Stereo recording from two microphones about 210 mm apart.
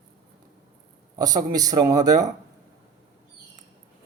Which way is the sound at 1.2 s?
15° right (ahead or behind).